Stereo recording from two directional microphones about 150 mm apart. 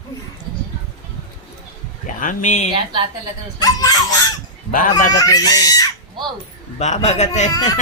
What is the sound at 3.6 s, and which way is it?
Speech, 25° left (ahead or behind).